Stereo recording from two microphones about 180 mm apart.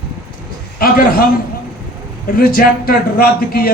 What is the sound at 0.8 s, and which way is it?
Speech, 55° left (ahead or behind).